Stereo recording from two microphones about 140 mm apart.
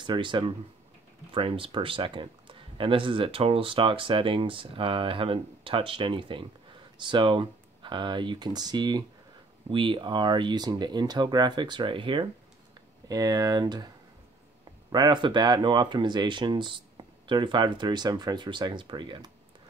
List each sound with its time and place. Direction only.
0.0 s speech: 35° right (ahead or behind)
13.1 s speech: 25° right (ahead or behind)
14.9 s speech: 30° right (ahead or behind)